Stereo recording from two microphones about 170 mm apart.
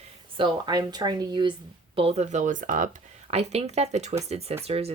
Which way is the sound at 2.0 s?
35° right (ahead or behind).